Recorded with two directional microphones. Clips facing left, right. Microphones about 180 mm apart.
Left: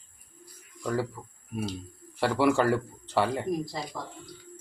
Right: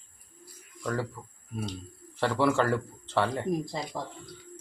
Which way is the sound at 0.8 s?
5° left (ahead or behind).